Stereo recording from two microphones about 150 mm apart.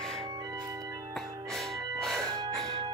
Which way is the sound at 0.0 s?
5° left (ahead or behind).